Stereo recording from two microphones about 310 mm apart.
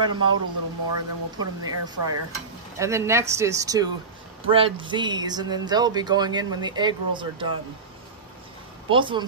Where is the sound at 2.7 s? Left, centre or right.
Centre.